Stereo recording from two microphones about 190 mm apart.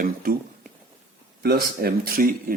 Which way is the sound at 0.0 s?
50° right (ahead or behind).